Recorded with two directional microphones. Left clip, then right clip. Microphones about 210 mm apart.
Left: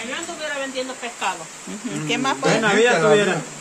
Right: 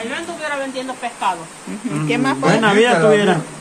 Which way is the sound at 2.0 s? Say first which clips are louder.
Right 3 dB; 5° left (ahead or behind).